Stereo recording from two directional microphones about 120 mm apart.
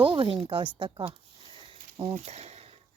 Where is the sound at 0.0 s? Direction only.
45° right (ahead or behind).